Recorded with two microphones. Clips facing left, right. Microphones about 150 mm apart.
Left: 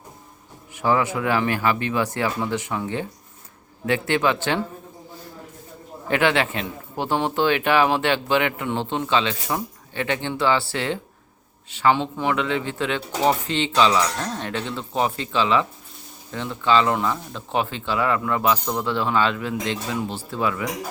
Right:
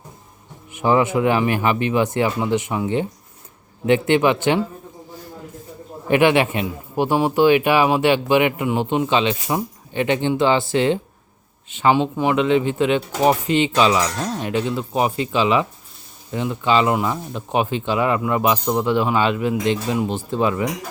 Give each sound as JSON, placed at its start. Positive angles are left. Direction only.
{"t": 0.7, "sound": "speech", "side_deg": -20}
{"t": 6.1, "sound": "speech", "side_deg": -15}